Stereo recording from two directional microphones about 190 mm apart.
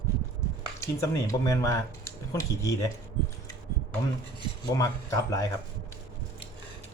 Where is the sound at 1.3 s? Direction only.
15° left (ahead or behind).